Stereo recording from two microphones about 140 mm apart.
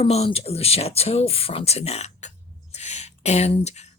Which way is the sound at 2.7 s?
55° left (ahead or behind).